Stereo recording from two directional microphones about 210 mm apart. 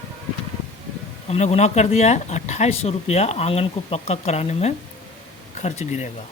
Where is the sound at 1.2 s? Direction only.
30° left (ahead or behind).